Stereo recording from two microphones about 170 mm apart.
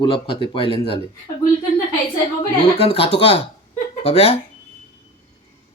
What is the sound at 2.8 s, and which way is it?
A man's voice, 35° left (ahead or behind).